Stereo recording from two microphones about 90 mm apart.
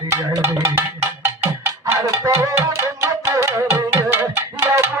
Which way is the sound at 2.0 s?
30° right (ahead or behind).